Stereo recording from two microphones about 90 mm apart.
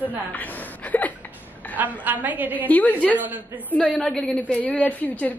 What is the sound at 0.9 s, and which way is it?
Speech, 20° left (ahead or behind).